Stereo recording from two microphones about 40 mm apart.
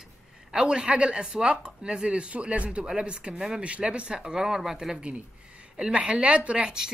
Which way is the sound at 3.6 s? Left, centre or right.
Right.